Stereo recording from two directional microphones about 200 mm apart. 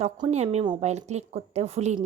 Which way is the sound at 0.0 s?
35° right (ahead or behind).